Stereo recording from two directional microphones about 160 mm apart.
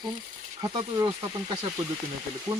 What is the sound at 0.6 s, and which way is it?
Speech, 25° right (ahead or behind).